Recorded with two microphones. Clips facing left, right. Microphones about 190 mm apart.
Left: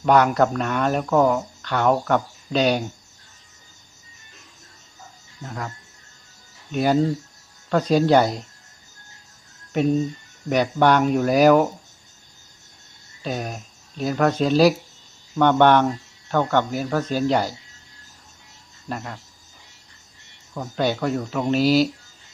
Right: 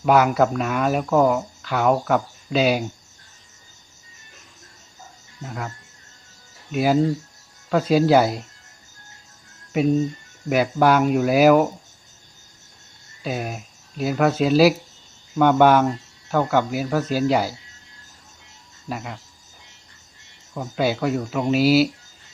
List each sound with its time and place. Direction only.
0.0 s speech: 5° right (ahead or behind)
5.4 s speech: 5° right (ahead or behind)
9.7 s speech: 5° right (ahead or behind)
13.2 s speech: 5° right (ahead or behind)
18.9 s speech: 5° right (ahead or behind)
20.5 s speech: 5° right (ahead or behind)